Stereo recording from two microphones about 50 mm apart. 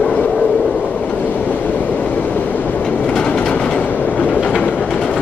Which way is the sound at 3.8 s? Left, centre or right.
Left.